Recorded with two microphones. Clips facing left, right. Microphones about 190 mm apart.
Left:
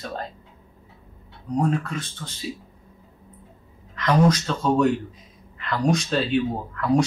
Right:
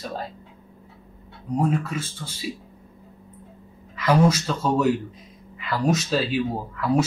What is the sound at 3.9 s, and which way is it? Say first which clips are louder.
Speech: even; 5° right (ahead or behind).